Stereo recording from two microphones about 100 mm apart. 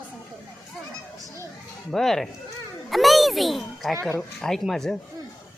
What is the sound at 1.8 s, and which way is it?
Speech, 5° left (ahead or behind).